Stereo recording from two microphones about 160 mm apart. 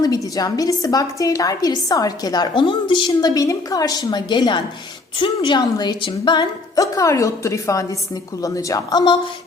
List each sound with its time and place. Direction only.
0.3 s a woman's voice: 25° left (ahead or behind)